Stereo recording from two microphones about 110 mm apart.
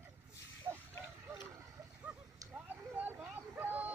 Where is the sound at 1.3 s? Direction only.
25° right (ahead or behind).